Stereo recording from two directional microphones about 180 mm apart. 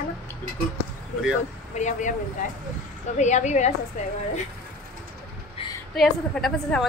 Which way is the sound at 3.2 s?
40° left (ahead or behind).